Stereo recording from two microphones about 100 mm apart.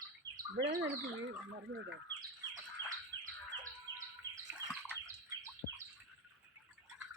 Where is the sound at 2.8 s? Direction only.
20° left (ahead or behind).